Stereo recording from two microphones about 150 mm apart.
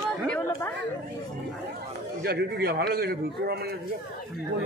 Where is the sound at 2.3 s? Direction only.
90° right.